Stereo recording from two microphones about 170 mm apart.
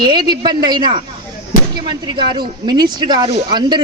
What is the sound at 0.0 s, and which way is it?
Speech, 25° right (ahead or behind).